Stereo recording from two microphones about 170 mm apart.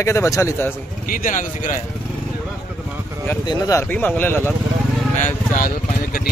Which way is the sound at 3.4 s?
25° left (ahead or behind).